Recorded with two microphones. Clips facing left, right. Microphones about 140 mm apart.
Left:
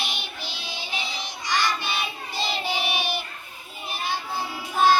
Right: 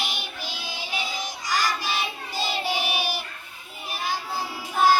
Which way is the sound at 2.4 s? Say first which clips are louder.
Right 1 dB; 5° right (ahead or behind).